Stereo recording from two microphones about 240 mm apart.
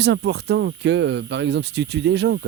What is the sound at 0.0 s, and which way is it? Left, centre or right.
Speech, right.